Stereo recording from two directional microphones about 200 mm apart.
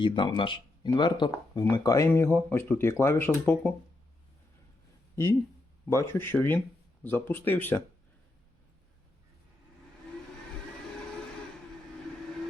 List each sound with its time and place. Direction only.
0.0 s speech: 25° left (ahead or behind); by 3.8 s 5° left (ahead or behind)
5.1 s speech: 15° left (ahead or behind)